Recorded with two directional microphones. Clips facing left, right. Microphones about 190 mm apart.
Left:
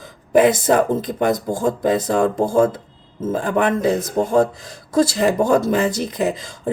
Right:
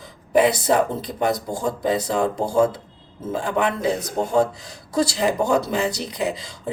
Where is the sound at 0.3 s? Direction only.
50° left (ahead or behind).